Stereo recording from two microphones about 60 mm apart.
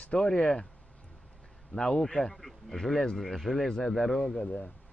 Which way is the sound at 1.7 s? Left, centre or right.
Centre.